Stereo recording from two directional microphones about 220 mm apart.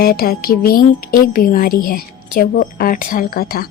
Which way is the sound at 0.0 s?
45° left (ahead or behind).